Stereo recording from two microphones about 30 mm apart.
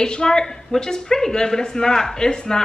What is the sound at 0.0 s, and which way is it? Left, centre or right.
Speech, left.